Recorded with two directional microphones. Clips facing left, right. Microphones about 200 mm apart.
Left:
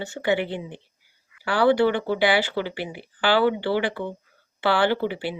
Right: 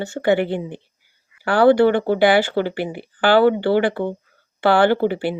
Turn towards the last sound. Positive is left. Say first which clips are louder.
# right 6 dB
turn(degrees=-50)  # may be behind; listen again after turning